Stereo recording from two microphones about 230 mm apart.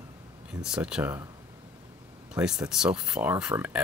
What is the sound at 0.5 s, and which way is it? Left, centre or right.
Speech, centre.